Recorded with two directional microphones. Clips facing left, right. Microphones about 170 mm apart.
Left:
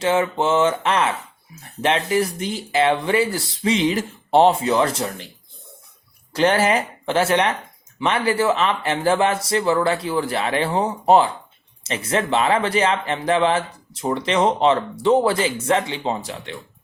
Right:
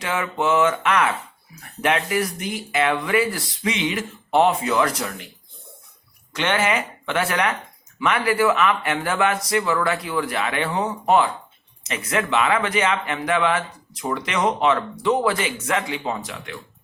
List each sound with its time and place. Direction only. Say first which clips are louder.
0.0 s speech: left 5 dB; 30° left (ahead or behind)
6.3 s a man's voice: left 4 dB; 35° left (ahead or behind)